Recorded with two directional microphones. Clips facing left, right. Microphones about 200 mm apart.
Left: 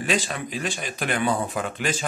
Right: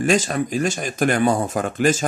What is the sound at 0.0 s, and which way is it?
Speech, 45° right (ahead or behind).